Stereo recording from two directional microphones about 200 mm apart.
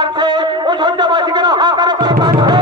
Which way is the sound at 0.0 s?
20° right (ahead or behind).